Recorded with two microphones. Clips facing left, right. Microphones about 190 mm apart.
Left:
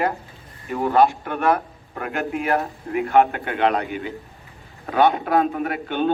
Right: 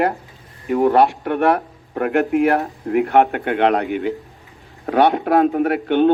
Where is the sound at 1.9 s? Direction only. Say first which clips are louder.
Right 9 dB; 65° right (ahead or behind).